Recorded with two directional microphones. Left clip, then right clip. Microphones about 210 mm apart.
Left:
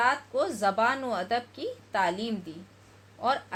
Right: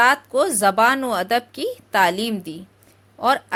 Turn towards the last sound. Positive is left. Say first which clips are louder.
# right 9 dB
turn(degrees=-35)  # may be behind; listen again after turning